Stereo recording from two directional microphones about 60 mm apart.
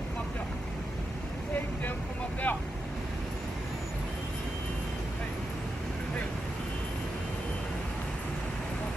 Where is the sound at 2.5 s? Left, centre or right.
Left.